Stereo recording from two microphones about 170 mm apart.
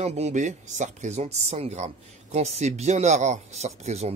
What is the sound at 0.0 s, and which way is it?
Speech, 40° right (ahead or behind).